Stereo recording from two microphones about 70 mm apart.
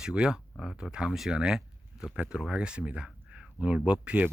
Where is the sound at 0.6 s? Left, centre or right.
Centre.